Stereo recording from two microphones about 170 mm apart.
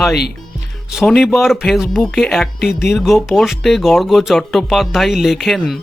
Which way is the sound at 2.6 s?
75° left (ahead or behind).